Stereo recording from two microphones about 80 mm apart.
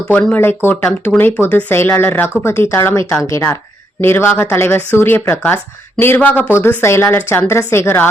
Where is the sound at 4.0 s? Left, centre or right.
Left.